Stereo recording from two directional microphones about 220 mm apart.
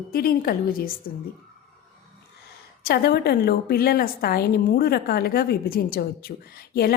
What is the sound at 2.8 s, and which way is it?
A woman's voice, 45° left (ahead or behind).